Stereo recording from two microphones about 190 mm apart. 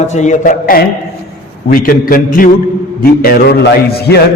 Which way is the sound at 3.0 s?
50° left (ahead or behind).